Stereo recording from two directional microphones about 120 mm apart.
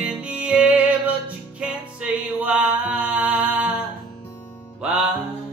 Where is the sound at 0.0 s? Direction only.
10° right (ahead or behind).